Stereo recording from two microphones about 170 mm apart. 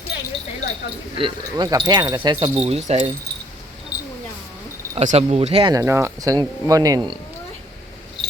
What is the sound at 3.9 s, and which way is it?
Camera, 5° right (ahead or behind).